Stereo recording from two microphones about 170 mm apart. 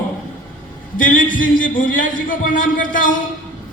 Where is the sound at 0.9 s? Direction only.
55° left (ahead or behind).